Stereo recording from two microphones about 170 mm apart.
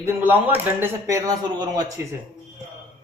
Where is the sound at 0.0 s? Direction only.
10° right (ahead or behind).